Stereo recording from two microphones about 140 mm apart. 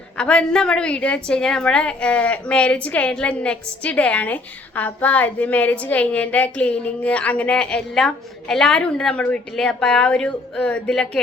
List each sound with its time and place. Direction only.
0.2 s a woman's voice: 5° left (ahead or behind)